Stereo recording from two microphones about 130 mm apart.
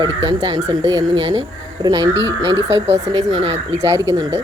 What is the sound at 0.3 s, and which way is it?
Speech, 35° right (ahead or behind).